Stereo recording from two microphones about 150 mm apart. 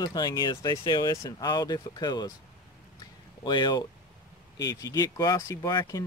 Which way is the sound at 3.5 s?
30° left (ahead or behind).